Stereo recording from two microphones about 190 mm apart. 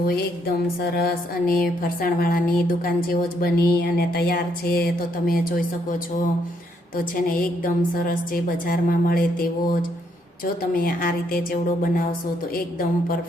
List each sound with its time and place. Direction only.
0.4 s a woman's voice: 55° left (ahead or behind)
6.9 s a woman's voice: 45° left (ahead or behind)